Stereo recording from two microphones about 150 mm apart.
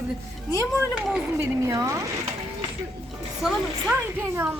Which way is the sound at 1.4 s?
20° right (ahead or behind).